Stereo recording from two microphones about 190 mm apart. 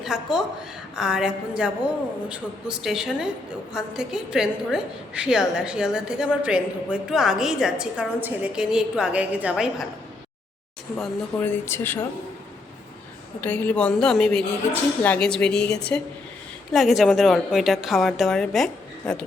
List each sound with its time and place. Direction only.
0.0 s a woman's voice: centre (ahead or behind)
11.0 s speech: 10° left (ahead or behind)
13.4 s a woman's voice: 10° left (ahead or behind)